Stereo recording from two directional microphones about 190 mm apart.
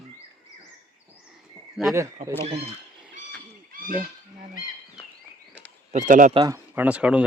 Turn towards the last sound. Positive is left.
turn(degrees=-5)  # may be behind; listen again after turning